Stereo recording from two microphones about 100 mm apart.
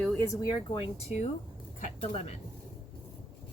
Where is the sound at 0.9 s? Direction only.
90° left.